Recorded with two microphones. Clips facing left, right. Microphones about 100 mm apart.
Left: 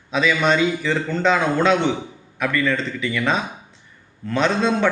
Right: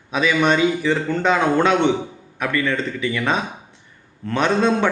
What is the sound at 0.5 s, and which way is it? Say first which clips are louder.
A man's voice: right 2 dB; 20° right (ahead or behind).